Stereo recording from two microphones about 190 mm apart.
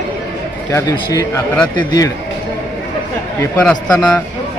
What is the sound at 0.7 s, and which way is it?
A man's voice, 15° left (ahead or behind).